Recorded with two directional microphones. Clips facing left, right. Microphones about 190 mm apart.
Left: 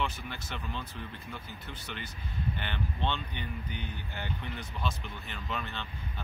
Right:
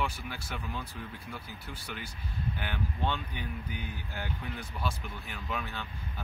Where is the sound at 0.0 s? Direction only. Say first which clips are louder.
Even; 5° right (ahead or behind).